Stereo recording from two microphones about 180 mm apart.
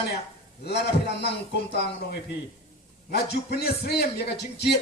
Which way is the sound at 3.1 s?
65° left (ahead or behind).